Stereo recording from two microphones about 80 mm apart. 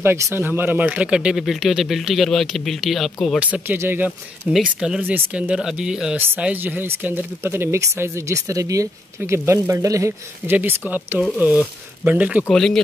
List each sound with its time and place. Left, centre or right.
0.0 s speech: right; by 3.3 s centre
3.3 s speech: centre
3.6 s speech: right
4.5 s speech: centre
6.1 s speech: right
10.4 s speech: right
12.4 s speech: centre